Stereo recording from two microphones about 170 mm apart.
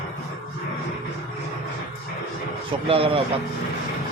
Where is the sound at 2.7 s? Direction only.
35° right (ahead or behind).